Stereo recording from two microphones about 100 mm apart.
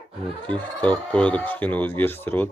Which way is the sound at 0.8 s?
10° left (ahead or behind).